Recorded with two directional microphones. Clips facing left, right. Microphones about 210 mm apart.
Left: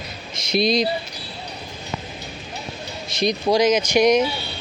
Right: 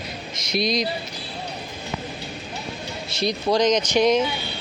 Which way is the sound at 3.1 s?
15° left (ahead or behind).